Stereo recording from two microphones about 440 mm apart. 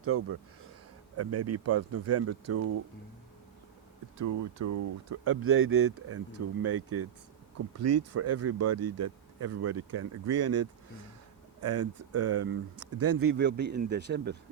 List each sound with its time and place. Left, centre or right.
0.0 s speech: right
4.2 s speech: right